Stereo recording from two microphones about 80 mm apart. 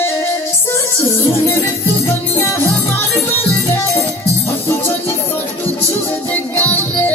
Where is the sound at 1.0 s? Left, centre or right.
Left.